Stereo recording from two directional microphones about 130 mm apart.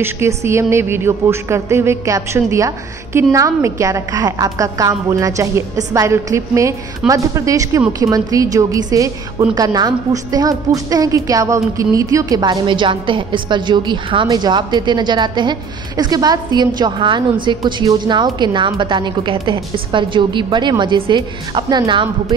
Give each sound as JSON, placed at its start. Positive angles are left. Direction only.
{"t": 0.0, "sound": "a woman's voice", "side_deg": -20}